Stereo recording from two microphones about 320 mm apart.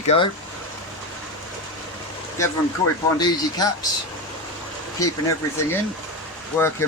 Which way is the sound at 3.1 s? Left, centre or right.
Centre.